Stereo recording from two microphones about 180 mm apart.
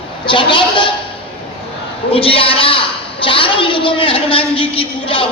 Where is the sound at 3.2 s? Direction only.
30° left (ahead or behind).